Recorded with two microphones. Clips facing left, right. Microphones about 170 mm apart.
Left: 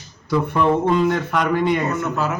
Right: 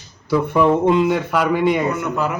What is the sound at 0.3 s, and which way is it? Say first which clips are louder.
A man's voice: right 3 dB; 10° right (ahead or behind).